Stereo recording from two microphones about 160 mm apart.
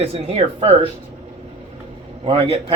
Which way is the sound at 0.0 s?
40° right (ahead or behind).